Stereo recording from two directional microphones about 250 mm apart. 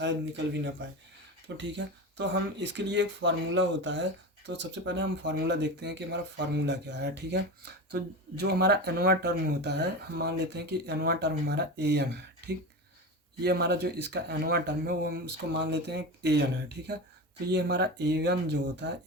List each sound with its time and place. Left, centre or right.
0.0 s speech: right